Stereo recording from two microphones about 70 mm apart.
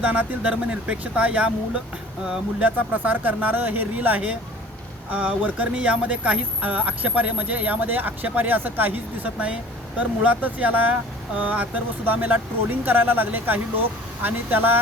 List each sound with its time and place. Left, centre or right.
0.0 s speech: centre
2.6 s speech: right